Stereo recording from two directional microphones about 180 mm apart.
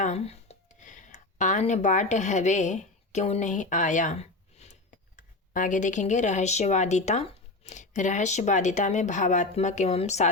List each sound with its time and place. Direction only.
0.0 s speech: 35° left (ahead or behind)